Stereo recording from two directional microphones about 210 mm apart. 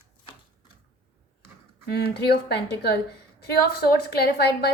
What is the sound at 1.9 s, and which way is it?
A woman's voice, 50° left (ahead or behind).